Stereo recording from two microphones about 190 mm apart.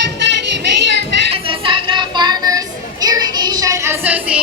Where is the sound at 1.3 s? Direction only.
25° right (ahead or behind).